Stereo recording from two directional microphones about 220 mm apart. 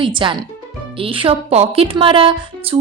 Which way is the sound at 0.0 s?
20° right (ahead or behind).